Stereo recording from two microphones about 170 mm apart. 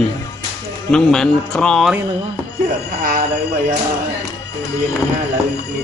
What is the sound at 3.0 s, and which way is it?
Speech, 60° right (ahead or behind).